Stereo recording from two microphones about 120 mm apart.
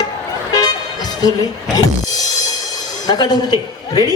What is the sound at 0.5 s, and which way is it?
Music, 30° left (ahead or behind).